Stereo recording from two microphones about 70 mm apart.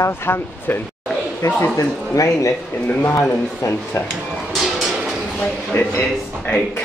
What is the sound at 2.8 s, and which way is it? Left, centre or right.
Speech, left.